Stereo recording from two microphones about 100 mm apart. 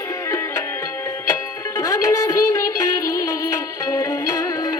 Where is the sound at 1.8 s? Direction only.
35° left (ahead or behind).